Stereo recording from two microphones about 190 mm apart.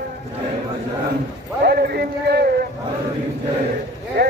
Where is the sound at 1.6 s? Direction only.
55° right (ahead or behind).